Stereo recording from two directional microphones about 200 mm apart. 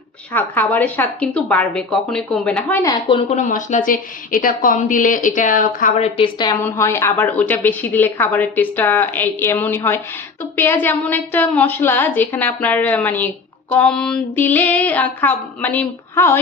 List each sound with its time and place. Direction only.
0.3 s a woman's voice: 10° left (ahead or behind)
3.2 s a woman's voice: 35° left (ahead or behind)
6.1 s a woman's voice: 25° left (ahead or behind)
6.6 s a woman's voice: 10° left (ahead or behind)